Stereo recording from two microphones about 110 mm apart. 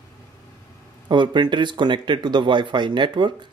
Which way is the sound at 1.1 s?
45° right (ahead or behind).